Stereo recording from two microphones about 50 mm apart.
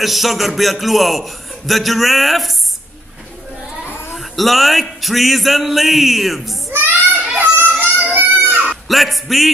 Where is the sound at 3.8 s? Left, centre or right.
Left.